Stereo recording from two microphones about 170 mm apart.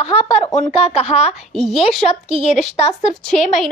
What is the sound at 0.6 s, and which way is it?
Speech, 40° left (ahead or behind).